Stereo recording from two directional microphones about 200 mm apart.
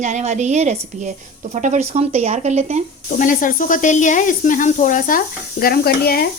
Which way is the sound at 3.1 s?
40° left (ahead or behind).